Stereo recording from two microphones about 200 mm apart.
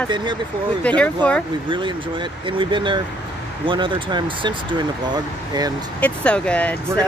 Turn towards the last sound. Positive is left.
turn(degrees=5)  # may be behind; listen again after turning